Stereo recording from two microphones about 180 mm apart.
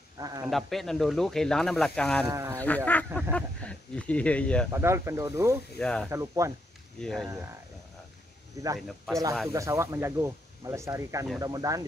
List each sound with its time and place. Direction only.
0.2 s speech: 20° right (ahead or behind)
0.5 s speech: centre (ahead or behind)
2.2 s speech: 15° right (ahead or behind)
2.5 s speech: 10° left (ahead or behind)
4.6 s speech: 15° right (ahead or behind)
5.8 s speech: 5° left (ahead or behind)
6.0 s speech: 15° right (ahead or behind)
7.0 s speech: centre (ahead or behind)
8.7 s speech: centre (ahead or behind)
9.5 s speech: 15° right (ahead or behind)